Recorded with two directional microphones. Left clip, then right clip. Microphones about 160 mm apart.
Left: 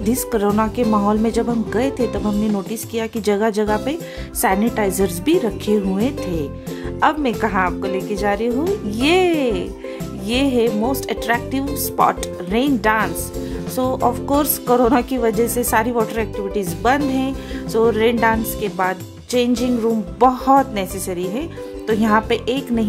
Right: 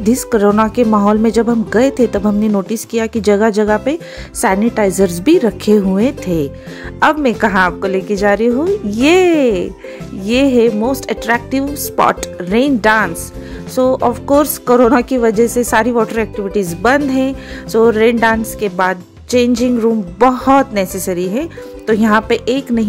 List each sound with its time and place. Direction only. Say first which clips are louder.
0.0 s speech: right 7 dB; 25° right (ahead or behind)